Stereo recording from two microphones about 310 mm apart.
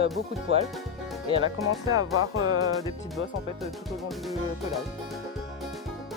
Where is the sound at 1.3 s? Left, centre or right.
Centre.